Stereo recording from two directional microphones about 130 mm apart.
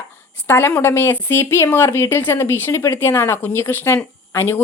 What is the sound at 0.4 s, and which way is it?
Speech, 15° left (ahead or behind).